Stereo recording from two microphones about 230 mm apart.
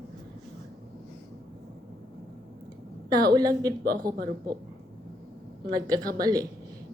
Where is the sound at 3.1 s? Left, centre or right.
Centre.